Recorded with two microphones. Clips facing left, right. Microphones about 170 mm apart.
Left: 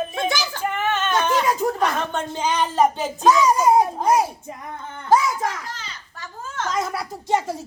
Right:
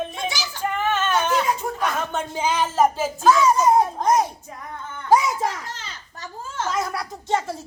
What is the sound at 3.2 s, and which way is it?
Music, 15° left (ahead or behind).